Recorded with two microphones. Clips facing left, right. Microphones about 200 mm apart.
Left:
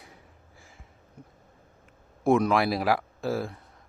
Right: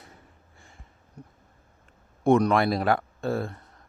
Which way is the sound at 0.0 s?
Centre (ahead or behind).